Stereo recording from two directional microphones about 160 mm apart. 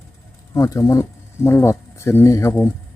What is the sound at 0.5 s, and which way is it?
Speech, 20° left (ahead or behind).